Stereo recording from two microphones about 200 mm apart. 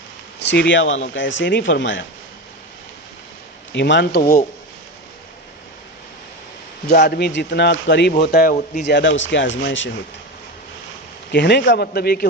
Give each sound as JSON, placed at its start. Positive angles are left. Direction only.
{"t": 0.3, "sound": "speech", "side_deg": 60}
{"t": 3.7, "sound": "speech", "side_deg": 65}
{"t": 6.8, "sound": "speech", "side_deg": 55}
{"t": 8.1, "sound": "speech", "side_deg": 50}
{"t": 8.8, "sound": "speech", "side_deg": 60}
{"t": 11.3, "sound": "speech", "side_deg": 60}